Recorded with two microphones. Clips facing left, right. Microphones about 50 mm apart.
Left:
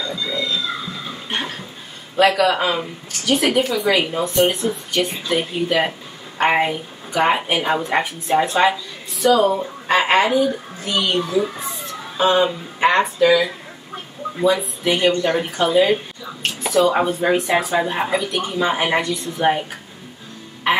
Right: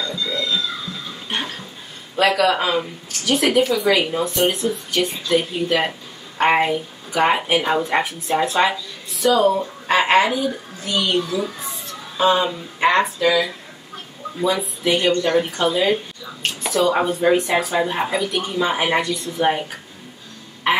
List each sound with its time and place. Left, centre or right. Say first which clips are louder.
0.0 s music: even; centre
1.3 s a sound: even; centre
2.1 s speech: left 1 dB; centre
11.1 s speech: left 2 dB; centre
11.6 s speech: left 3 dB; centre
20.7 s a woman's voice: left 1 dB; centre